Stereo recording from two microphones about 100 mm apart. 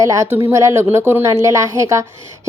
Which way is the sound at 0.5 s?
30° right (ahead or behind).